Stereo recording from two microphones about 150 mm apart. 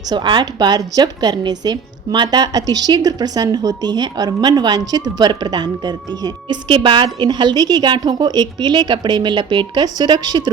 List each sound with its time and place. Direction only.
0.1 s a woman's voice: 30° right (ahead or behind)